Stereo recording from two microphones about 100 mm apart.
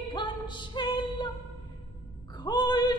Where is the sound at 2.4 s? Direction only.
45° left (ahead or behind).